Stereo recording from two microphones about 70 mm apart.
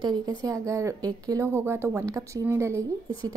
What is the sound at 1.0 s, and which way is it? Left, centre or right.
Speech, right.